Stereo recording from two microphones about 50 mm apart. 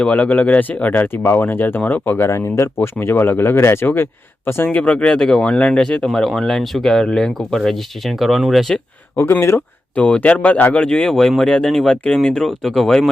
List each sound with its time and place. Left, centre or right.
0.0 s speech: left
1.0 s speech: left
1.4 s speech: left
2.1 s speech: left
4.7 s speech: left; by 8.7 s centre
9.6 s speech: left
10.8 s speech: centre
11.1 s speech: centre